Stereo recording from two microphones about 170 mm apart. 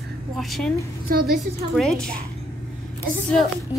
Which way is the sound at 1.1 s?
60° right (ahead or behind).